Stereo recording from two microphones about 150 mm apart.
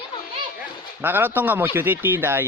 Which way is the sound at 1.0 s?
15° right (ahead or behind).